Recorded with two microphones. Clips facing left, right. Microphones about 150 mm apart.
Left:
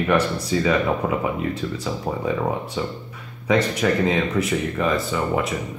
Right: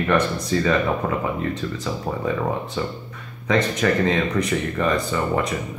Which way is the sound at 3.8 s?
10° left (ahead or behind).